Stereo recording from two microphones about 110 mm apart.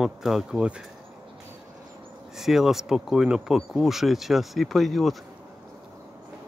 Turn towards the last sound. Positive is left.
turn(degrees=0)  # may be behind; listen again after turning